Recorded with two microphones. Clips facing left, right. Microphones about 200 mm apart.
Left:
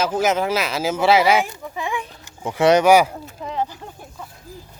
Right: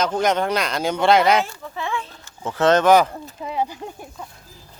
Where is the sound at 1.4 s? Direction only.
15° left (ahead or behind).